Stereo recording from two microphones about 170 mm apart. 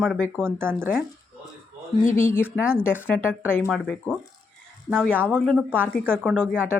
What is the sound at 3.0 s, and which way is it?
Speech, 10° left (ahead or behind).